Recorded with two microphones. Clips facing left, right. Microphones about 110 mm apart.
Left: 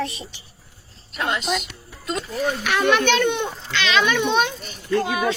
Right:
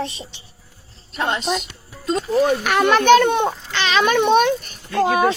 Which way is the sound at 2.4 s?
45° right (ahead or behind).